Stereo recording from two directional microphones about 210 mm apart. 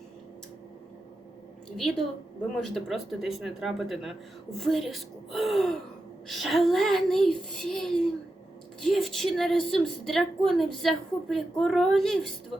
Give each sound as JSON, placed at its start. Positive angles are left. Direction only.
{"t": 1.7, "sound": "a woman's voice", "side_deg": 0}